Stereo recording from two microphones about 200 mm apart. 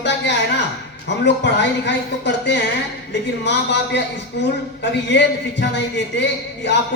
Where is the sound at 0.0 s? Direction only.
60° left (ahead or behind).